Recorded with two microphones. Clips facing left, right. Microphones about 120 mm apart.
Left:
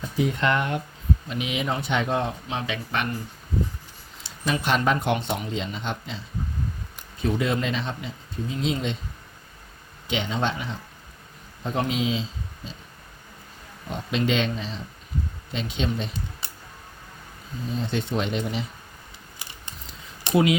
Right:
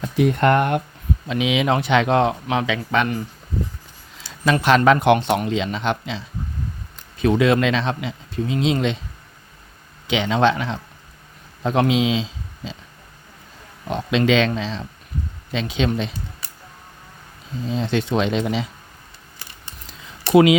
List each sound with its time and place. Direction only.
0.0 s speech: 60° right (ahead or behind)
1.3 s speech: 90° right
4.4 s speech: 90° right
10.1 s speech: 90° right
13.8 s speech: 90° right
17.7 s speech: 90° right
20.3 s speech: 90° right